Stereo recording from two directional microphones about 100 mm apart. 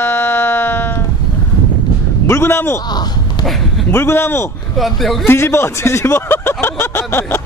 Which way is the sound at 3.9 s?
25° left (ahead or behind).